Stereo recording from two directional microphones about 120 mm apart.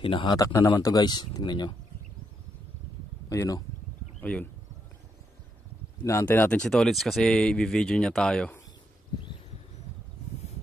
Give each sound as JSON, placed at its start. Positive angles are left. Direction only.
{"t": 0.0, "sound": "speech", "side_deg": 50}
{"t": 0.4, "sound": "speech", "side_deg": 30}
{"t": 3.3, "sound": "speech", "side_deg": 30}
{"t": 4.2, "sound": "speech", "side_deg": 10}
{"t": 6.2, "sound": "speech", "side_deg": 15}
{"t": 6.6, "sound": "speech", "side_deg": 5}